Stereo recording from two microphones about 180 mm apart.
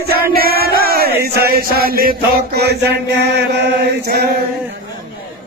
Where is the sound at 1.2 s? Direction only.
60° right (ahead or behind).